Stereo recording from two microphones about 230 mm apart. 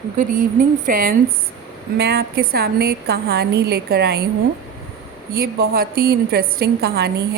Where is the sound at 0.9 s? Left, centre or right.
Right.